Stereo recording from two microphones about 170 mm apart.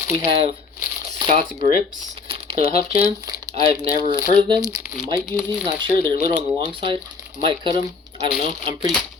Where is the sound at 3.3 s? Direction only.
20° right (ahead or behind).